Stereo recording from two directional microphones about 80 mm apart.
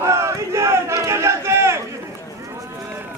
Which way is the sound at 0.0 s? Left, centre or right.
Right.